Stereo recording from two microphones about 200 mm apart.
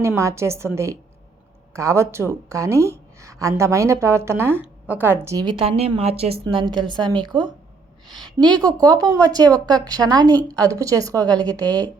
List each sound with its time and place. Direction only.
0.0 s a woman's voice: 15° right (ahead or behind)